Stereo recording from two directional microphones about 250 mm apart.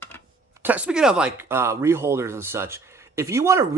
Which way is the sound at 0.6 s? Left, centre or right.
Centre.